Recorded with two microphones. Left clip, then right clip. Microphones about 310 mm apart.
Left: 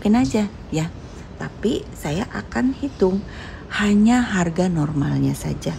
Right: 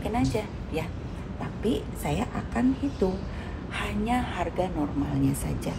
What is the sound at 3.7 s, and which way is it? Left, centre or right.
Speech, left.